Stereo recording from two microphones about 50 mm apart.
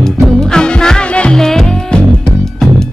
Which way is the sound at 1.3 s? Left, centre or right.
Centre.